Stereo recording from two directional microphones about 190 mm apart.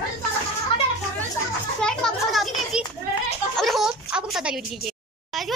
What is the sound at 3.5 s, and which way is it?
Speech, centre (ahead or behind).